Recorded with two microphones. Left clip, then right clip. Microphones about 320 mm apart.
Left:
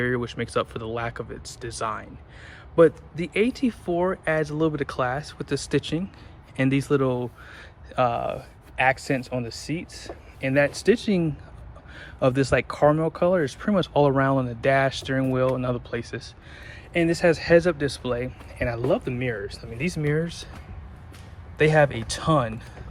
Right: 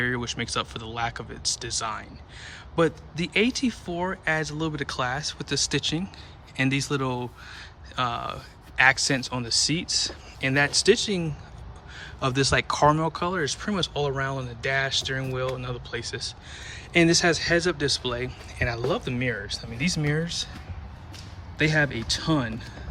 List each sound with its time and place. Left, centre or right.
0.0 s speech: centre
21.6 s speech: centre